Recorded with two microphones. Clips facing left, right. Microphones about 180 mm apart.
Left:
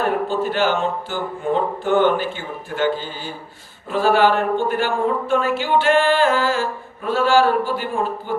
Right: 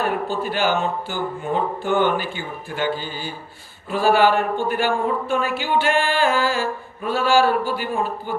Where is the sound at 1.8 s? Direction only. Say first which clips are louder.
Left 4 dB; 10° right (ahead or behind).